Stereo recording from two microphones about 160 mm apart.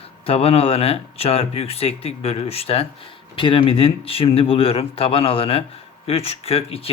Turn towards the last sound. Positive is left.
turn(degrees=35)  # may be behind; listen again after turning